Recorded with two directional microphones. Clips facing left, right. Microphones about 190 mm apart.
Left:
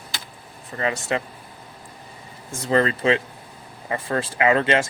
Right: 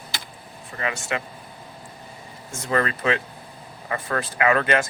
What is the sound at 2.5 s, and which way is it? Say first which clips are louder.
Speech: left 4 dB; 30° left (ahead or behind).